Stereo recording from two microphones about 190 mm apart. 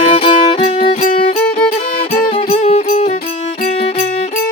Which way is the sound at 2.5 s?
35° left (ahead or behind).